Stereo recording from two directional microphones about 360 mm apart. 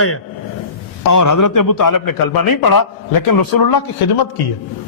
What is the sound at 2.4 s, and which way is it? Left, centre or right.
A man's voice, left.